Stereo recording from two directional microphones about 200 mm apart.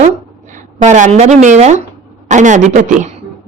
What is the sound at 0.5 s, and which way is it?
A woman's voice, 40° right (ahead or behind).